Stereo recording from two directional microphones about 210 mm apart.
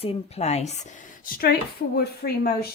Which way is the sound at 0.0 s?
30° left (ahead or behind).